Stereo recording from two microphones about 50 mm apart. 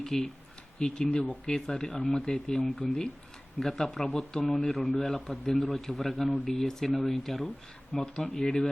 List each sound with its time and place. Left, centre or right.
0.0 s speech: centre
0.8 s speech: centre
8.0 s speech: left